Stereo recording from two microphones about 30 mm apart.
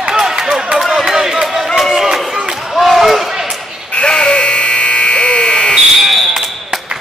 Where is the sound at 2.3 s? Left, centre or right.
Centre.